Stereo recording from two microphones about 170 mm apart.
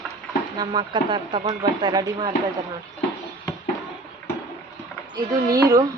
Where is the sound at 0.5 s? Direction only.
25° right (ahead or behind).